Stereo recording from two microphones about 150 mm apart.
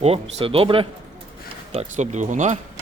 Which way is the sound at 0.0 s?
40° right (ahead or behind).